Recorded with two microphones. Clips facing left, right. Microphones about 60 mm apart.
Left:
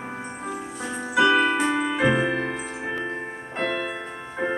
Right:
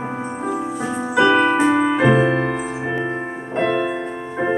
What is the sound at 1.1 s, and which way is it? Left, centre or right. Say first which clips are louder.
Music: right 4 dB; centre.